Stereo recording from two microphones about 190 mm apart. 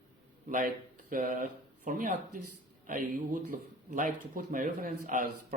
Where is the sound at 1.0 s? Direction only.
45° right (ahead or behind).